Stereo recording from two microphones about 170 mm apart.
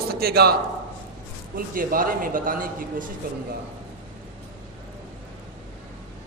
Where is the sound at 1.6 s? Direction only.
55° right (ahead or behind).